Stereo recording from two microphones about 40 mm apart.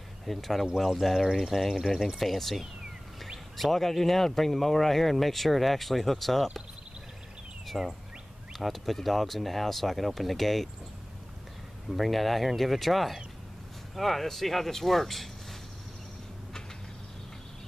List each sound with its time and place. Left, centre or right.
0.2 s speech: centre
7.6 s a sound: centre
8.5 s speech: centre
11.9 s speech: centre